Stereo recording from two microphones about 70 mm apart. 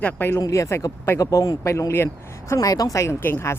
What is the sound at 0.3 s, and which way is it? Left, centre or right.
Speech, left.